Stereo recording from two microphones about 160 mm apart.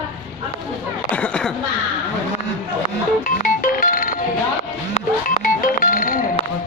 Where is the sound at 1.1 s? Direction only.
5° left (ahead or behind).